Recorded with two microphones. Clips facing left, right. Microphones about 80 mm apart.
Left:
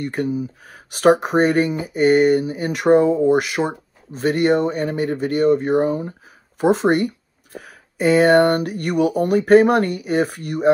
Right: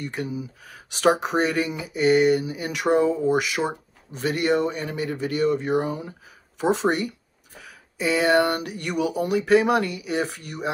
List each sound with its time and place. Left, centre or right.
0.0 s speech: left